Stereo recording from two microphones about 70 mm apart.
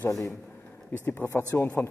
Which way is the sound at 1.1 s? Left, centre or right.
Left.